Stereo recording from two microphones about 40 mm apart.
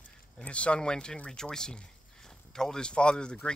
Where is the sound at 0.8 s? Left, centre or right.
Centre.